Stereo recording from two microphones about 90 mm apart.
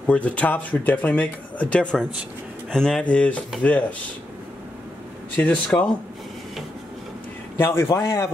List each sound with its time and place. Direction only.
0.0 s speech: 15° left (ahead or behind)
5.3 s speech: 15° left (ahead or behind)
7.5 s a man's voice: 25° left (ahead or behind)